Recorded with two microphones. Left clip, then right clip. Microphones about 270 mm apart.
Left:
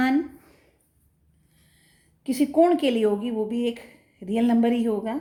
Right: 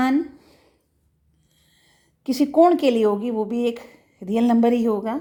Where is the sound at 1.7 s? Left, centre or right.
Right.